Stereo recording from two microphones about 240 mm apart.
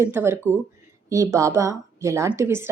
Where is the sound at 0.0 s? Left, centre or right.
Centre.